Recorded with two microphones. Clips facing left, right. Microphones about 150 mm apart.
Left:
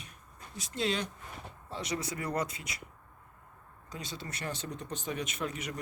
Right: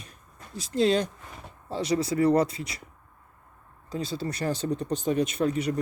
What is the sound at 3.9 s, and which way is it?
Speech, 30° right (ahead or behind).